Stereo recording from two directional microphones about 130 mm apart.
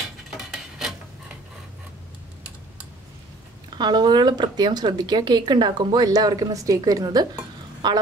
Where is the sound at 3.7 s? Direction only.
35° right (ahead or behind).